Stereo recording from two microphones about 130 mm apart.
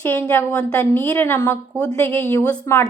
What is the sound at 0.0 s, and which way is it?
A woman's voice, 15° left (ahead or behind).